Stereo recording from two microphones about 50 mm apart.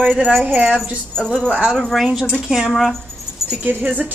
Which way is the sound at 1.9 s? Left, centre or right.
Centre.